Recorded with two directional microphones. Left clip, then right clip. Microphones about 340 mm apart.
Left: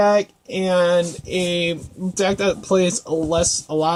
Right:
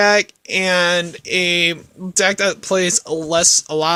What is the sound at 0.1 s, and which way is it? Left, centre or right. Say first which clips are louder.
Speech: right 3 dB; right.